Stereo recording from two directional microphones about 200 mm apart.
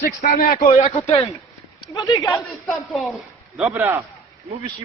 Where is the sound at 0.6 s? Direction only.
30° left (ahead or behind).